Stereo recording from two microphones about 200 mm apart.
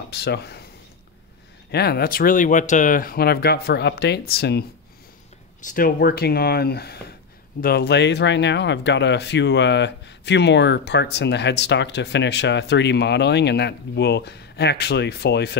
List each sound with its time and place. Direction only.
0.1 s speech: 55° left (ahead or behind)
1.7 s speech: 55° left (ahead or behind)
5.6 s speech: 40° left (ahead or behind)